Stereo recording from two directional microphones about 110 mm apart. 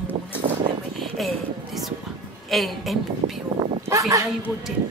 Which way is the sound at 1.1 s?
Centre (ahead or behind).